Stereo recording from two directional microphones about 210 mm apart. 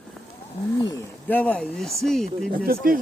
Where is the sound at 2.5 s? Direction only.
40° right (ahead or behind).